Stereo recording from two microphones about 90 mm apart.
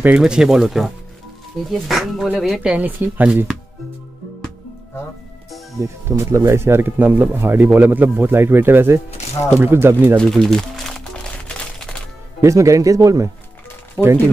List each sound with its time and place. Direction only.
0.2 s speech: 5° right (ahead or behind)
2.6 s speech: 15° right (ahead or behind)
5.8 s speech: 30° right (ahead or behind)
10.1 s speech: 5° left (ahead or behind)
11.4 s a sound: 10° left (ahead or behind)
12.4 s speech: 35° right (ahead or behind)